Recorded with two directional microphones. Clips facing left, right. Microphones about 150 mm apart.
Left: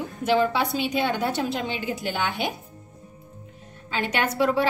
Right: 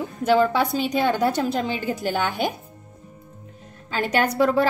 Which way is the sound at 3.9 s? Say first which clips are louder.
Right 4 dB; 45° right (ahead or behind).